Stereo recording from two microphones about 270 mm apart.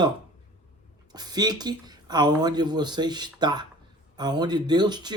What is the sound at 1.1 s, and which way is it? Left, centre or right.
Speech, centre.